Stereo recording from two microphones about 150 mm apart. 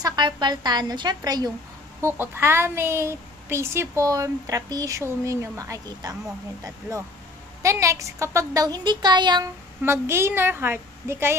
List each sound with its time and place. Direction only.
0.0 s a child's voice: 30° right (ahead or behind)
2.0 s a child's voice: 15° right (ahead or behind)
7.6 s a child's voice: 20° right (ahead or behind)
9.8 s a woman's voice: 15° right (ahead or behind)